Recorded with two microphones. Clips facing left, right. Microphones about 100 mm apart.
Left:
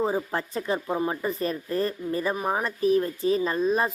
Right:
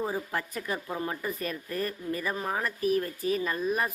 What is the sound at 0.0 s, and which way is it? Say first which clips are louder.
Speech: left 5 dB; 30° left (ahead or behind).